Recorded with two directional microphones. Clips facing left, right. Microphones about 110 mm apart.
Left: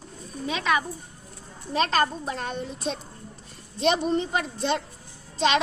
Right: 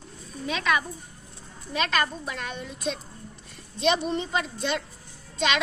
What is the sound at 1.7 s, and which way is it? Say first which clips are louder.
A woman's voice: left 3 dB; 35° left (ahead or behind).